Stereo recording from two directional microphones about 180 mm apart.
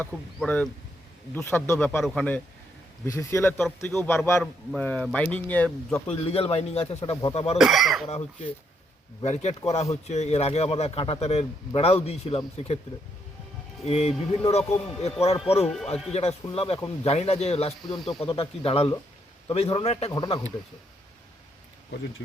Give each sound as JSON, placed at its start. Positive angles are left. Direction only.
{"t": 0.0, "sound": "speech", "side_deg": 10}
{"t": 6.1, "sound": "speech", "side_deg": 35}
{"t": 7.6, "sound": "speech", "side_deg": 0}
{"t": 9.2, "sound": "speech", "side_deg": 35}
{"t": 13.8, "sound": "speech", "side_deg": 35}
{"t": 20.1, "sound": "speech", "side_deg": 25}